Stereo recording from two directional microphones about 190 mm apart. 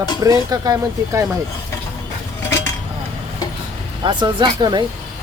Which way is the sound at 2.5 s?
15° left (ahead or behind).